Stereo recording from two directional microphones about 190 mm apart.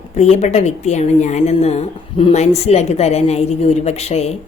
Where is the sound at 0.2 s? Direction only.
35° left (ahead or behind).